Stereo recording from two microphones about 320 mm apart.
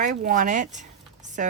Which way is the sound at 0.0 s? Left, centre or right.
Right.